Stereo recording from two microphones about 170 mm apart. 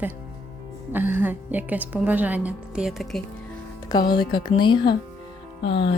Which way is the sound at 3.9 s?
25° left (ahead or behind).